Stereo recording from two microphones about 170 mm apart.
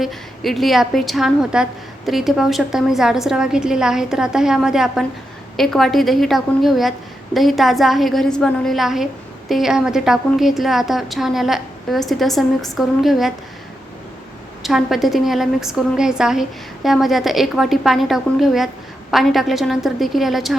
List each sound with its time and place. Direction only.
0.0 s a woman's voice: centre (ahead or behind)
14.6 s a woman's voice: centre (ahead or behind)